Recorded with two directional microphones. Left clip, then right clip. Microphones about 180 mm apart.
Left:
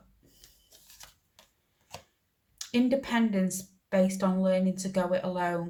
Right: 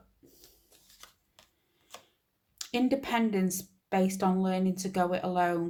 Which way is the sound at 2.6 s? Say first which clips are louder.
Left 2 dB; 45° right (ahead or behind).